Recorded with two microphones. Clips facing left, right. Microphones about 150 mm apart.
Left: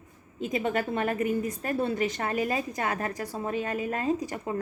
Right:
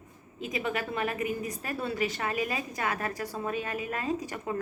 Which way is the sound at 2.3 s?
35° left (ahead or behind).